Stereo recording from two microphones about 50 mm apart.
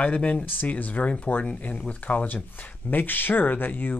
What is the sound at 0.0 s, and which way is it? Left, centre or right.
Speech, left.